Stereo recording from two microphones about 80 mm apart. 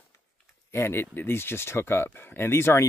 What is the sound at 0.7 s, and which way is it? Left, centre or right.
Speech, left.